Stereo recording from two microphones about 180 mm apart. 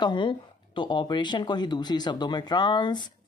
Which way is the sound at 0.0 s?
25° left (ahead or behind).